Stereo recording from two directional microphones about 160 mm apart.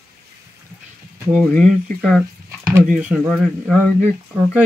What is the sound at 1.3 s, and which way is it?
Speech, 5° left (ahead or behind).